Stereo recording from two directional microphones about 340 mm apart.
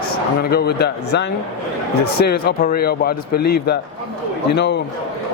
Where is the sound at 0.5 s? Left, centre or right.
Left.